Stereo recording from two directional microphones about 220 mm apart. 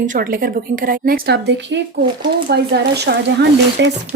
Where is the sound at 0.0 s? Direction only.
40° right (ahead or behind).